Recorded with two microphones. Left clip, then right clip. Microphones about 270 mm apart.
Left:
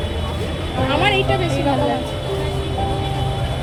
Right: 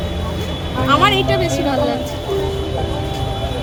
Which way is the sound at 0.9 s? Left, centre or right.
Right.